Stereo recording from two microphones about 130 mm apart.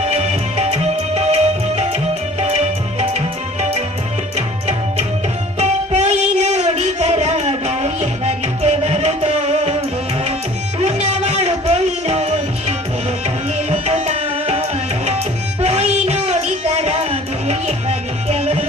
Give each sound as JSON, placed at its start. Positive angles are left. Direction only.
{"t": 0.0, "sound": "music", "side_deg": -55}
{"t": 11.0, "sound": "music", "side_deg": -55}
{"t": 13.2, "sound": "tabla", "side_deg": -60}
{"t": 15.6, "sound": "music", "side_deg": -55}